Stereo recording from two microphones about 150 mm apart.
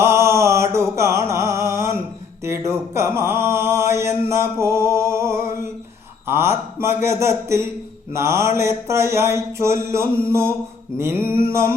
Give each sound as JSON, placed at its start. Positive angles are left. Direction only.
{"t": 0.0, "sound": "music", "side_deg": -20}
{"t": 6.2, "sound": "speech", "side_deg": -15}
{"t": 8.1, "sound": "a sound", "side_deg": -20}